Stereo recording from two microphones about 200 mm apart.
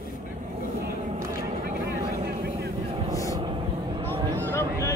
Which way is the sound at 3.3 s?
25° right (ahead or behind).